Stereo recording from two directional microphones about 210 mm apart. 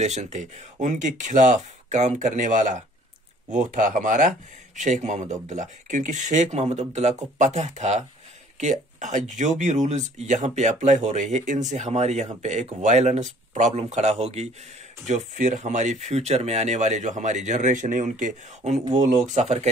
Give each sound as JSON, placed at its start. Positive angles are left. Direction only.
{"t": 0.0, "sound": "speech", "side_deg": -35}